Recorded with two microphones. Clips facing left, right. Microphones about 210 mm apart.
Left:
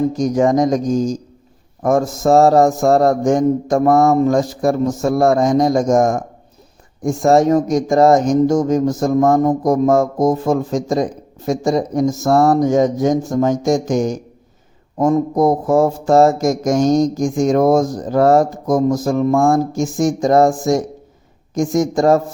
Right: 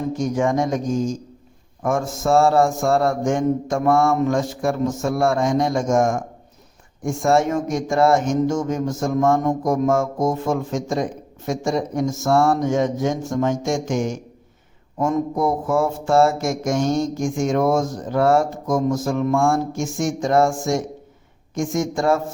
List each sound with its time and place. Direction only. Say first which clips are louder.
0.1 s speech: left 6 dB; 40° left (ahead or behind)